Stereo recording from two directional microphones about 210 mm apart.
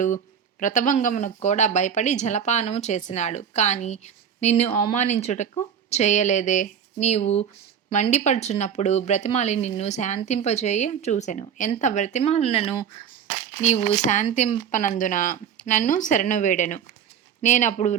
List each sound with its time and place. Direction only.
0.6 s a woman's voice: 40° left (ahead or behind)